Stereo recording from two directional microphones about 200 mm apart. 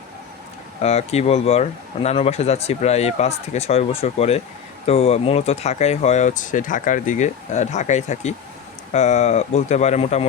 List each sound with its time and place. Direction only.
0.8 s speech: 30° left (ahead or behind)